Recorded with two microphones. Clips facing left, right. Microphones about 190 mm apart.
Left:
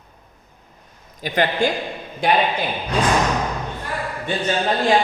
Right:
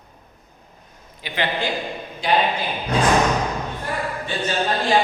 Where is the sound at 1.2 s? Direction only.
45° left (ahead or behind).